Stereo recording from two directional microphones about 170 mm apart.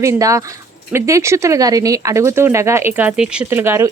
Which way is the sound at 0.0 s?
20° right (ahead or behind).